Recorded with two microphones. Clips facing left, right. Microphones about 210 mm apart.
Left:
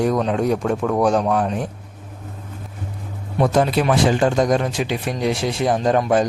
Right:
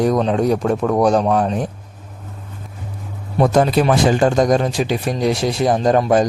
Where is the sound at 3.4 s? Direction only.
40° right (ahead or behind).